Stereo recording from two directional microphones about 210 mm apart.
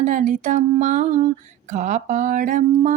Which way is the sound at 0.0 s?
35° right (ahead or behind).